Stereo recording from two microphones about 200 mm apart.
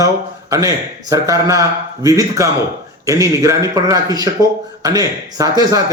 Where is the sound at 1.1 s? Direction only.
15° right (ahead or behind).